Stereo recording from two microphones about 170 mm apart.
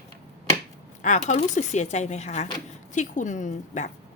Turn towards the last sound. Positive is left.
turn(degrees=45)  # may be behind; listen again after turning